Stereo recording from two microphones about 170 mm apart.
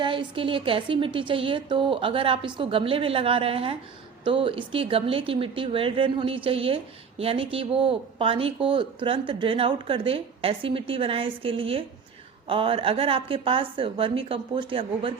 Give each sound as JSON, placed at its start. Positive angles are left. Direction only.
{"t": 0.0, "sound": "speech", "side_deg": -30}